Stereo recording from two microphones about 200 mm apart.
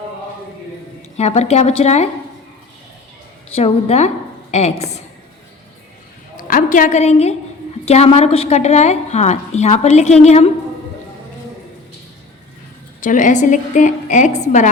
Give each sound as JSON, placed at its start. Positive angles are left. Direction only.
{"t": 1.1, "sound": "a woman's voice", "side_deg": 35}
{"t": 3.5, "sound": "a woman's voice", "side_deg": 30}
{"t": 6.5, "sound": "a woman's voice", "side_deg": 40}
{"t": 13.0, "sound": "a woman's voice", "side_deg": 40}